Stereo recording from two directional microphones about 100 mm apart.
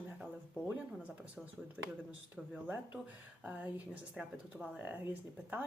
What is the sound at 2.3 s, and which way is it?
Speech, 15° right (ahead or behind).